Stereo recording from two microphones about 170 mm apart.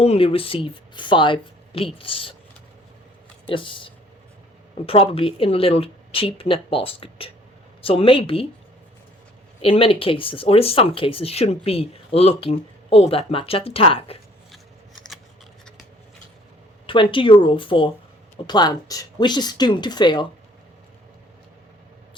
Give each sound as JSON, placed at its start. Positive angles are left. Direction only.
{"t": 0.0, "sound": "speech", "side_deg": 35}
{"t": 3.4, "sound": "speech", "side_deg": 30}
{"t": 9.6, "sound": "speech", "side_deg": 30}
{"t": 16.8, "sound": "speech", "side_deg": 30}